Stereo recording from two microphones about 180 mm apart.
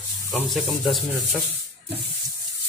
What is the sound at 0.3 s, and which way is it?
Speech, centre (ahead or behind).